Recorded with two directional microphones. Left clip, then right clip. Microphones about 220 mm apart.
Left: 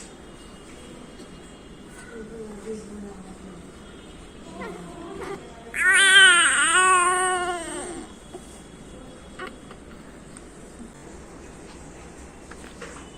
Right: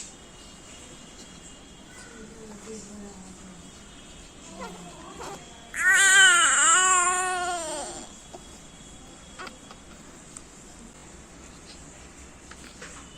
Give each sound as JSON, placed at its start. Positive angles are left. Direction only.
{"t": 5.7, "sound": "baby cry", "side_deg": -15}
{"t": 7.3, "sound": "baby cry", "side_deg": 0}